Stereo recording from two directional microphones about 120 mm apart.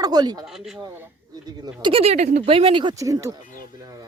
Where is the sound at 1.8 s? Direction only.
50° right (ahead or behind); by 2.4 s 70° right (ahead or behind).